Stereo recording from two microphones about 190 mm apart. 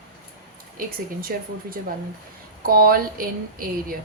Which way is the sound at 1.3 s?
50° right (ahead or behind).